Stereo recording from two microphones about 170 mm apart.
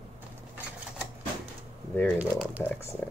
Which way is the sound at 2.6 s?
10° left (ahead or behind).